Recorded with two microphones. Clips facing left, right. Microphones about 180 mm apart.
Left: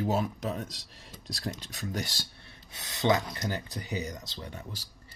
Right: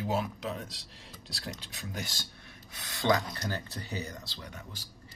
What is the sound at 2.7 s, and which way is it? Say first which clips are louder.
Speech: left 2 dB; 20° left (ahead or behind).